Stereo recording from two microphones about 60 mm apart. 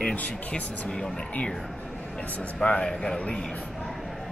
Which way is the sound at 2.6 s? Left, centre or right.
Centre.